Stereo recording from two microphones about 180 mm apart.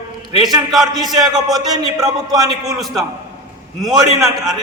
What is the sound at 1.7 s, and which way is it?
Speech, 20° right (ahead or behind).